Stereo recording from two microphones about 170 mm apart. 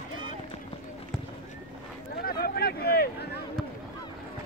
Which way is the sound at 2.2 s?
65° left (ahead or behind).